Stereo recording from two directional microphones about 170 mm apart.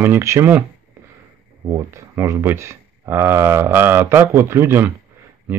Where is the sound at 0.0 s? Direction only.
15° right (ahead or behind).